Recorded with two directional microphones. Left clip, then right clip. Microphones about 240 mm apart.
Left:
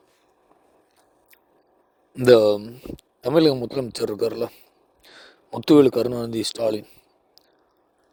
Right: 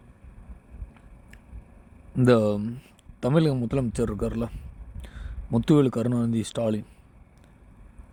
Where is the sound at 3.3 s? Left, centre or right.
Left.